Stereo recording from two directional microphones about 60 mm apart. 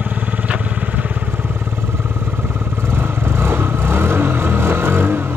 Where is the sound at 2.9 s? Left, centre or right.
Right.